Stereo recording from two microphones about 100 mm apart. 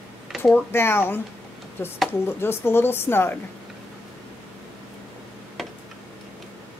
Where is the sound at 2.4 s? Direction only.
25° left (ahead or behind).